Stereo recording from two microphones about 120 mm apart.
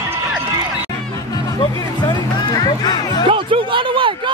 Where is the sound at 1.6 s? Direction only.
40° left (ahead or behind).